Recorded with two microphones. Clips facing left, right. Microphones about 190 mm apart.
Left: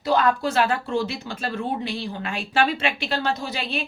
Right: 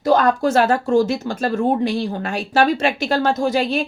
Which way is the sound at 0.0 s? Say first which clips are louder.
Right 5 dB; 45° right (ahead or behind).